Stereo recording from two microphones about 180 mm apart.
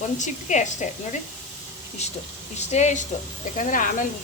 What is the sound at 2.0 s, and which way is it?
A woman's voice, 35° left (ahead or behind).